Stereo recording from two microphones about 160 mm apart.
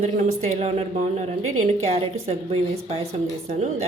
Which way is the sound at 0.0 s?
45° right (ahead or behind).